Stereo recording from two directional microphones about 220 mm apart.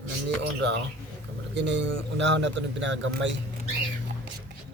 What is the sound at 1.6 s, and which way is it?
A man's voice, 55° right (ahead or behind).